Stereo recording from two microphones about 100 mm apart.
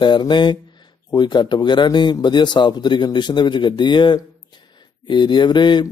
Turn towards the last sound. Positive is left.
turn(degrees=50)  # may be behind; listen again after turning